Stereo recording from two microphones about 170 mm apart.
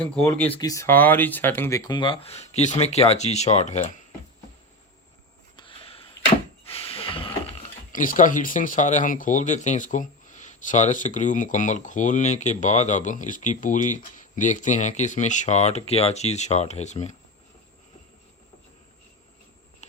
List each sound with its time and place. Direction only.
0.0 s speech: 10° left (ahead or behind)
0.5 s speech: 20° left (ahead or behind)
1.8 s speech: 25° left (ahead or behind)
5.5 s a sound: 30° left (ahead or behind)
7.9 s speech: 50° left (ahead or behind)